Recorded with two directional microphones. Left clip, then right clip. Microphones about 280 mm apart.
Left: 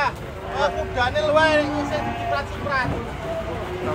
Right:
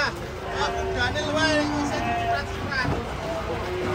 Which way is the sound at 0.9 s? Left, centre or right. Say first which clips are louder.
Left 9 dB; centre.